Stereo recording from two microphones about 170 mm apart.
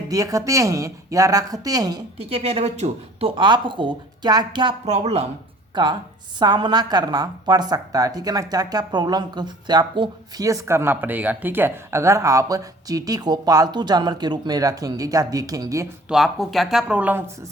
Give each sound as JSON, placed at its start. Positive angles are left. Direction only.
{"t": 0.1, "sound": "a woman's voice", "side_deg": -20}
{"t": 2.1, "sound": "a woman's voice", "side_deg": -35}
{"t": 4.9, "sound": "speech", "side_deg": -40}
{"t": 5.7, "sound": "a woman's voice", "side_deg": -25}
{"t": 16.0, "sound": "speech", "side_deg": 0}